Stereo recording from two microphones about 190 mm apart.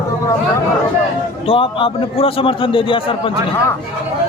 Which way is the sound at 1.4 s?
30° left (ahead or behind).